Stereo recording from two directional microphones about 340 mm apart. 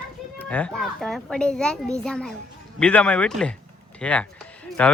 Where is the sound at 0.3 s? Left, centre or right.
Centre.